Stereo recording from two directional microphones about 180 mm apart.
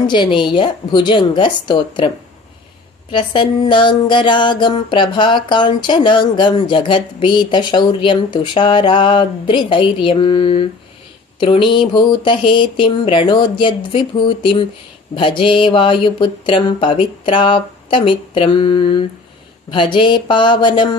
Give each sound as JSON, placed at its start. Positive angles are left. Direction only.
{"t": 0.0, "sound": "speech", "side_deg": 25}